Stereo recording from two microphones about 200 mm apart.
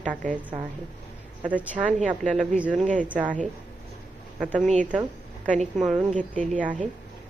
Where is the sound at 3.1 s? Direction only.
5° right (ahead or behind).